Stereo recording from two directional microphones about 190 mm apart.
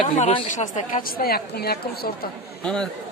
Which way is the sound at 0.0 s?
35° left (ahead or behind).